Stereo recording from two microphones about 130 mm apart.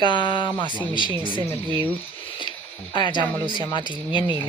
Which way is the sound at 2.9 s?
35° left (ahead or behind).